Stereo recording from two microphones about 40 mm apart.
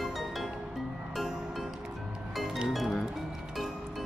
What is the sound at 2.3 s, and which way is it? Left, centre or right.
Music, centre.